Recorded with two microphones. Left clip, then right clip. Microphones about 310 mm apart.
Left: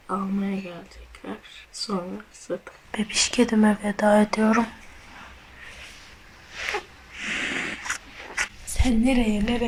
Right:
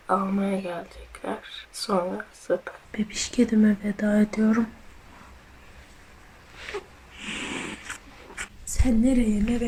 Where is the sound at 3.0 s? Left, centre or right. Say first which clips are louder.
Left 4 dB; centre.